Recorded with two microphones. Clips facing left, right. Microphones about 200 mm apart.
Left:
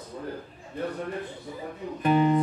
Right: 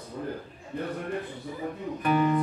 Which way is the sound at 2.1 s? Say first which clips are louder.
Left 2 dB; 25° left (ahead or behind).